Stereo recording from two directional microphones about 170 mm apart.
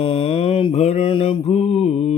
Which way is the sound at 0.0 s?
30° left (ahead or behind).